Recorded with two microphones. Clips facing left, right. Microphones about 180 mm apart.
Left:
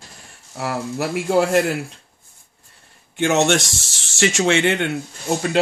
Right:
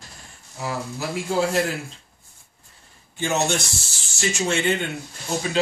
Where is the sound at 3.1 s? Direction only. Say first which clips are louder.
Left 6 dB; 75° left (ahead or behind).